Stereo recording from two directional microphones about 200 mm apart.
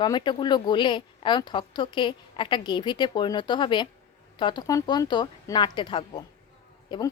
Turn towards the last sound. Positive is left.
turn(degrees=25)  # may be behind; listen again after turning